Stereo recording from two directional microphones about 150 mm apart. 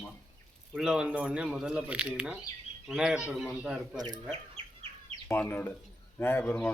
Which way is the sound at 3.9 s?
25° right (ahead or behind).